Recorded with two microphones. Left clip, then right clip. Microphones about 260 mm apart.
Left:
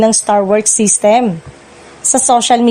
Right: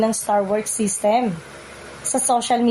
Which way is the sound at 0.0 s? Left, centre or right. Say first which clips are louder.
Left 8 dB; left.